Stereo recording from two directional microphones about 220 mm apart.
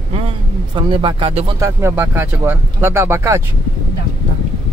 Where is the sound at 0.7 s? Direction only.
20° right (ahead or behind).